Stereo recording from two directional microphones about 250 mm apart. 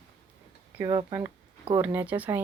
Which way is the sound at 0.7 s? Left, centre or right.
Centre.